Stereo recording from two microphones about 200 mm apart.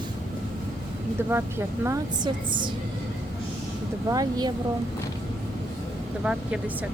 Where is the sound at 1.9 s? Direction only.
20° right (ahead or behind).